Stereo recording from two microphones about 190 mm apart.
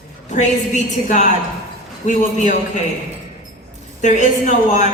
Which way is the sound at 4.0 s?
40° left (ahead or behind).